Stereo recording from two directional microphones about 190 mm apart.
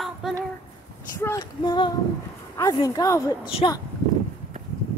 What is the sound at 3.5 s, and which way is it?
Speech, 30° left (ahead or behind).